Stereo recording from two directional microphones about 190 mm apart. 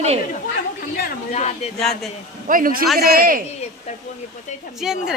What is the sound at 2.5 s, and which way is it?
Speech, 50° right (ahead or behind).